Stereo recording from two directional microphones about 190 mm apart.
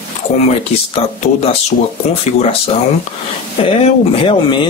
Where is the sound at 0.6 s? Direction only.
30° left (ahead or behind).